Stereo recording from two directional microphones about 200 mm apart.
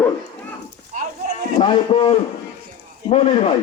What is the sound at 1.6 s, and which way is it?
A man's voice, 25° left (ahead or behind).